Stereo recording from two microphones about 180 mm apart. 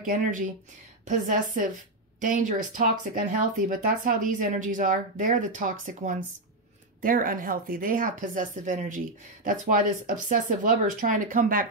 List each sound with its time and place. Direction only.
0.0 s speech: 50° right (ahead or behind)